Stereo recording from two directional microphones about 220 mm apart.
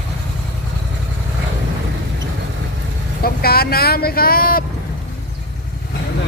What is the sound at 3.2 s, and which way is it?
Vehicle, 45° left (ahead or behind).